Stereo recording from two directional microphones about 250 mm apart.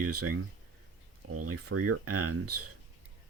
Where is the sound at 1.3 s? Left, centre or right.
Right.